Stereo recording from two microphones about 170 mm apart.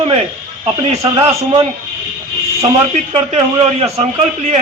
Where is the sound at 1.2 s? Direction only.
20° right (ahead or behind).